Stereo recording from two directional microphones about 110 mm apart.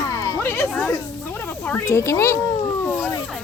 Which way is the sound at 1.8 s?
25° left (ahead or behind).